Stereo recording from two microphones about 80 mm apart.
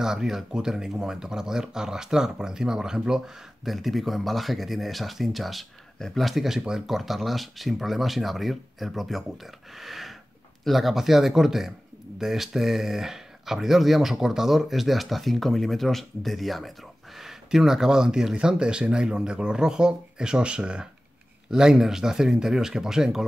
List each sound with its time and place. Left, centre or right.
0.0 s speech: centre
9.8 s sniff: centre
10.6 s speech: centre